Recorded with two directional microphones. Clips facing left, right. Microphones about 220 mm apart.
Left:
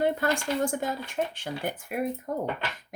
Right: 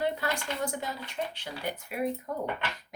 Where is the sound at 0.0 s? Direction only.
50° left (ahead or behind).